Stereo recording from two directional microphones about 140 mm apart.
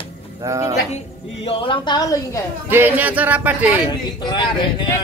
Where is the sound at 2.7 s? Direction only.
15° right (ahead or behind).